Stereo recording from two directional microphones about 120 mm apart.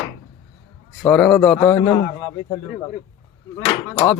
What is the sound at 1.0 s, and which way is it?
Speech, 5° left (ahead or behind).